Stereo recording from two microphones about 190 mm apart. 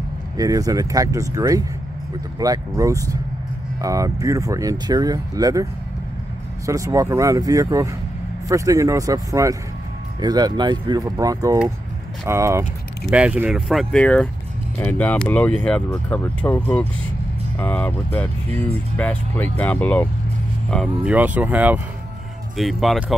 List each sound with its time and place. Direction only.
0.4 s speech: 20° right (ahead or behind); by 20.1 s 5° left (ahead or behind)
21.0 s speech: 10° right (ahead or behind)